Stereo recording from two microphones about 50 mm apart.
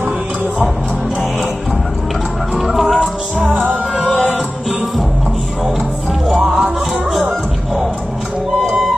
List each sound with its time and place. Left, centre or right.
2.5 s music: centre
6.3 s music: centre